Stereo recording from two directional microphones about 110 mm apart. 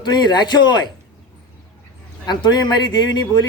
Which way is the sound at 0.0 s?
40° left (ahead or behind).